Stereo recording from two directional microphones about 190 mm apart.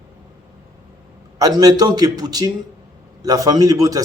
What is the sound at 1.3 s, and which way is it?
Speech, 20° right (ahead or behind).